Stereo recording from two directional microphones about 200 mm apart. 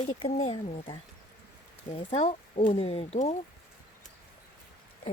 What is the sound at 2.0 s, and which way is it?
Speech, 35° left (ahead or behind).